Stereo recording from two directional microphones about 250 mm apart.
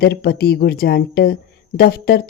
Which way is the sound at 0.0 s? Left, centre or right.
Left.